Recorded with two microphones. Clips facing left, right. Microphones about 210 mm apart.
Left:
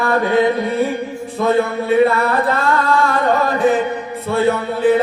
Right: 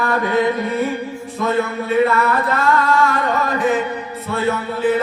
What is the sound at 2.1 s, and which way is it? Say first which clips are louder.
Music: left 2 dB; 35° left (ahead or behind).